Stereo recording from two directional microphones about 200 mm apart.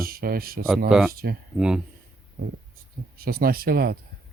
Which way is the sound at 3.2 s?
50° right (ahead or behind).